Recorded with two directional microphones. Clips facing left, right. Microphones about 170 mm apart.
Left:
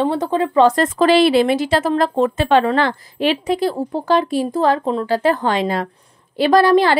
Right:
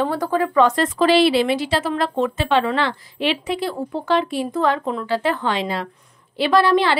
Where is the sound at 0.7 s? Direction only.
45° left (ahead or behind).